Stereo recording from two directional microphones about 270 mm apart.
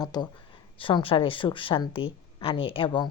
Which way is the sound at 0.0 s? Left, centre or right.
Centre.